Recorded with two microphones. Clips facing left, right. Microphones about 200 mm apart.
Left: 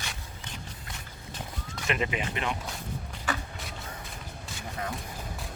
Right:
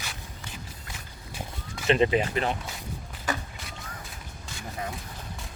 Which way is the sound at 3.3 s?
40° right (ahead or behind).